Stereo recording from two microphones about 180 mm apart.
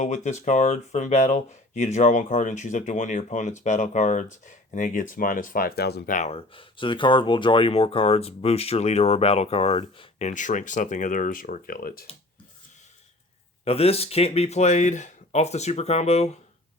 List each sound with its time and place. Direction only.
0.0 s speech: 40° left (ahead or behind); by 6.1 s 60° left (ahead or behind)
6.1 s speech: 35° left (ahead or behind); by 12.0 s 55° left (ahead or behind)
13.7 s speech: 35° left (ahead or behind)